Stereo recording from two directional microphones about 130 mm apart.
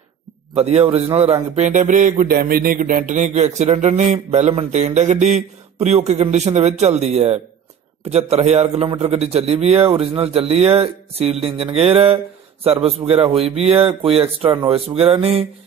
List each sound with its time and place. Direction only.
0.6 s a man's voice: 50° right (ahead or behind)
1.7 s a sound: 85° right; by 8.8 s 55° right (ahead or behind)
8.8 s a man's voice: 50° right (ahead or behind)